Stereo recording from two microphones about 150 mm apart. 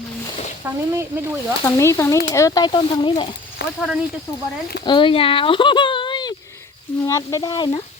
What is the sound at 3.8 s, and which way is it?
Speech, 5° right (ahead or behind).